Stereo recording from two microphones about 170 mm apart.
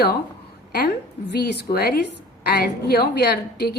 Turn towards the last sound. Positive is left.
turn(degrees=70)  # may be behind; listen again after turning